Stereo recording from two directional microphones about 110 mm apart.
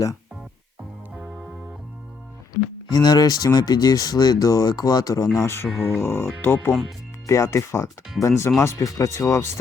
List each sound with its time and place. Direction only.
2.9 s speech: 35° left (ahead or behind)
5.4 s speech: 25° left (ahead or behind)